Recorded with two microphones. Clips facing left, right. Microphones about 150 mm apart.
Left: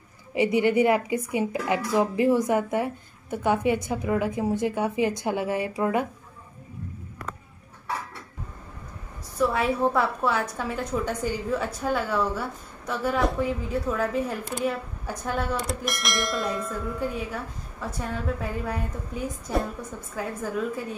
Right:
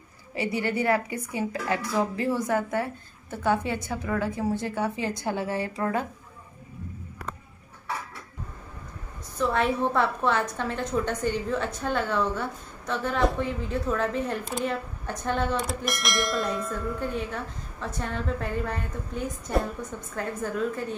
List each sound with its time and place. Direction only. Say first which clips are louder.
0.3 s a woman's voice: left 6 dB; 20° left (ahead or behind)
9.4 s a woman's voice: left 2 dB; 5° left (ahead or behind)